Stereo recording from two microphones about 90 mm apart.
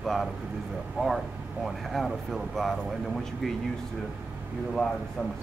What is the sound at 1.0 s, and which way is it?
Speech, 15° right (ahead or behind).